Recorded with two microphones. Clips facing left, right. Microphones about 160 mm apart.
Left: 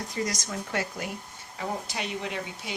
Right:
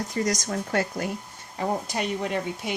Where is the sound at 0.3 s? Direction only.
45° right (ahead or behind).